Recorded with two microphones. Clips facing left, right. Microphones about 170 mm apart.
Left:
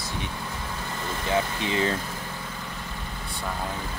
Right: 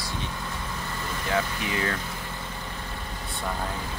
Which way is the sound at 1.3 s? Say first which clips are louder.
Left 2 dB; 25° left (ahead or behind).